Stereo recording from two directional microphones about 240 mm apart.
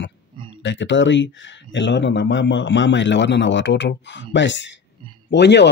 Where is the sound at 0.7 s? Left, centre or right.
Left.